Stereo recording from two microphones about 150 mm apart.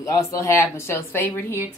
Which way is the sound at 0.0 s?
20° left (ahead or behind).